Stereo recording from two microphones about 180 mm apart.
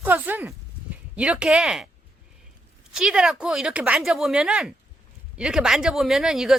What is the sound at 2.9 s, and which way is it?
Speech, 5° right (ahead or behind).